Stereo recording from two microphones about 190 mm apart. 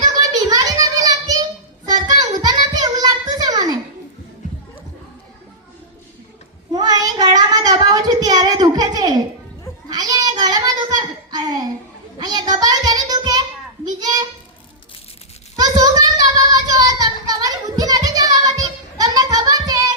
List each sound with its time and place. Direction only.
0.1 s child singing: 20° right (ahead or behind)
2.1 s a sound: 20° right (ahead or behind)
6.7 s child singing: 20° right (ahead or behind)
9.9 s a sound: 20° right (ahead or behind)
12.2 s child singing: 20° right (ahead or behind)
15.5 s child singing: 20° right (ahead or behind)